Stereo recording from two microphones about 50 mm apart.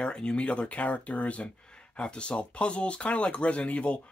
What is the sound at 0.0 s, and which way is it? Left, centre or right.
Speech, centre.